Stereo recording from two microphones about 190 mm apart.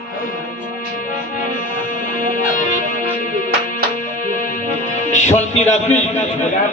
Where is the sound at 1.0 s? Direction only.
45° left (ahead or behind).